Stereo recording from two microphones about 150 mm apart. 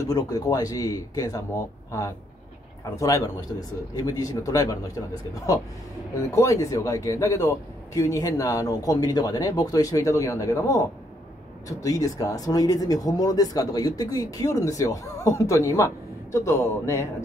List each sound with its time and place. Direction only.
0.0 s speech: 25° left (ahead or behind)
6.3 s speech: 20° left (ahead or behind)